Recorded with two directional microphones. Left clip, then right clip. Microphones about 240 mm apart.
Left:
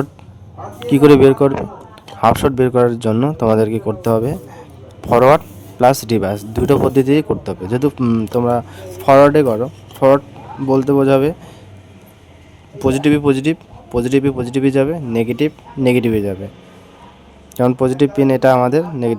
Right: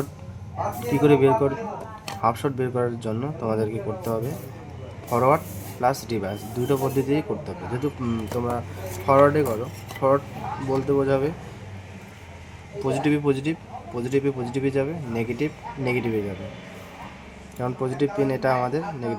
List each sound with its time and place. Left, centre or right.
1.0 s a man's voice: left
12.8 s a man's voice: left
17.6 s a man's voice: left